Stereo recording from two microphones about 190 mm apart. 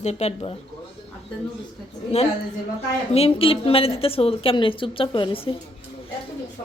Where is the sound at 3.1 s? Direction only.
30° left (ahead or behind).